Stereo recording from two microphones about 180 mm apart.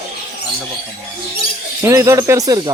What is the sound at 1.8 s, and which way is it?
Speech, 15° right (ahead or behind).